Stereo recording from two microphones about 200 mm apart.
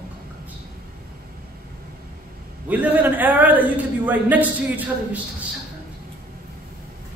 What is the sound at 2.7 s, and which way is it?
A man's voice, 10° right (ahead or behind).